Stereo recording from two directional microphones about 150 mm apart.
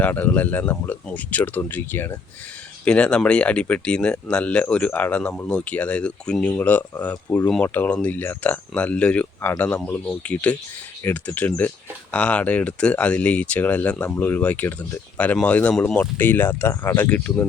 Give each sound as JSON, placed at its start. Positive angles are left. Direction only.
{"t": 0.0, "sound": "speech", "side_deg": 10}